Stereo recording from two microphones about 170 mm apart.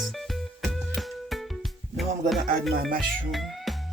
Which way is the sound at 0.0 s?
Centre (ahead or behind).